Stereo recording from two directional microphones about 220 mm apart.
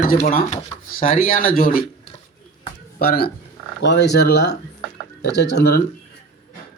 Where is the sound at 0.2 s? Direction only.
35° left (ahead or behind).